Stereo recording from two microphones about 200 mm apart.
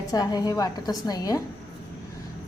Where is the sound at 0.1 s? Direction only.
20° left (ahead or behind).